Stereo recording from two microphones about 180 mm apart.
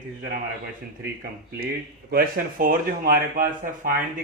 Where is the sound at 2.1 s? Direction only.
55° right (ahead or behind).